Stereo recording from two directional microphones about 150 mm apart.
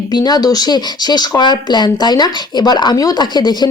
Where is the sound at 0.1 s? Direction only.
25° left (ahead or behind).